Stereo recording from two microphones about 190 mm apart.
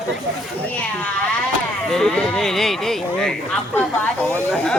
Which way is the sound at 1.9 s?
5° left (ahead or behind).